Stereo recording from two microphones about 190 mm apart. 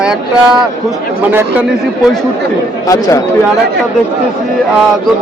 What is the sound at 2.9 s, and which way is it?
Speech, 15° left (ahead or behind).